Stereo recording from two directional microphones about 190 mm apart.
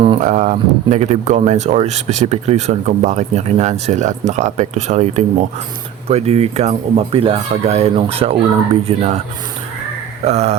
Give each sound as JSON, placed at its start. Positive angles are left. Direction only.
{"t": 0.0, "sound": "speech", "side_deg": -35}
{"t": 10.2, "sound": "speech", "side_deg": -35}